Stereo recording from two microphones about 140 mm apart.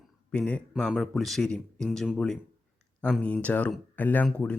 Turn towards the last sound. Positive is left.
turn(degrees=10)  # may be behind; listen again after turning